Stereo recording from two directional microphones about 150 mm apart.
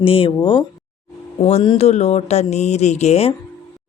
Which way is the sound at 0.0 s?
40° left (ahead or behind).